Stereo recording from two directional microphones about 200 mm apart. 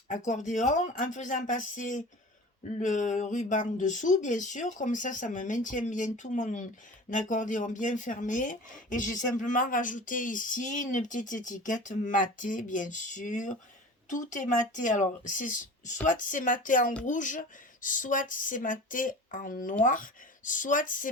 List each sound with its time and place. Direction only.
0.3 s speech: 40° left (ahead or behind)